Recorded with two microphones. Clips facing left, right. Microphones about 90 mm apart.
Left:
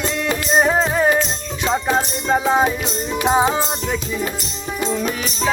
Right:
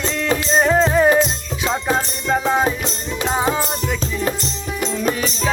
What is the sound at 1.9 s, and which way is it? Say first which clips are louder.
Music: left 1 dB; 15° left (ahead or behind).